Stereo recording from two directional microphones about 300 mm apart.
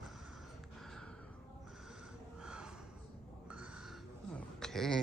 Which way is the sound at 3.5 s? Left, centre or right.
Centre.